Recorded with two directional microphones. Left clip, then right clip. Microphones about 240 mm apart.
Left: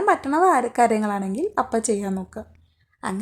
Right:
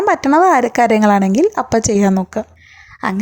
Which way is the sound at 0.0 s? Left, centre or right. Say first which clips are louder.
Right 7 dB; right.